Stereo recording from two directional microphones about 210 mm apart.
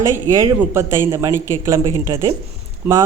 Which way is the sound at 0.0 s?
15° right (ahead or behind).